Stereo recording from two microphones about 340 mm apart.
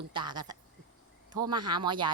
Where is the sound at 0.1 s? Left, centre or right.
Centre.